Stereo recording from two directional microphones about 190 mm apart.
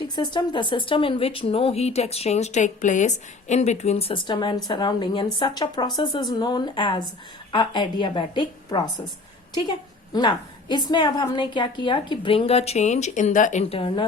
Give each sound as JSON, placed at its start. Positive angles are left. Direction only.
{"t": 0.2, "sound": "speech", "side_deg": 25}
{"t": 10.1, "sound": "speech", "side_deg": 25}